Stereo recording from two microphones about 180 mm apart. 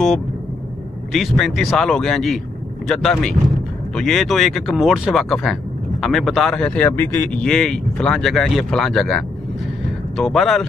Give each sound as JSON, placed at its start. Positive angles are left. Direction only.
{"t": 1.1, "sound": "speech", "side_deg": 0}